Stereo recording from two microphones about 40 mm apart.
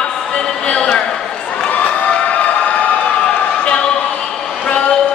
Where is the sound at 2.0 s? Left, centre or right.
Left.